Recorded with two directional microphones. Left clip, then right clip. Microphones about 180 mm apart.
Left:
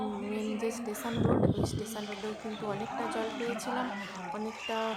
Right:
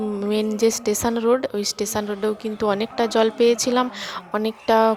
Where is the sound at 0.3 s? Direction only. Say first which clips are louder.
Right 16 dB; 45° right (ahead or behind).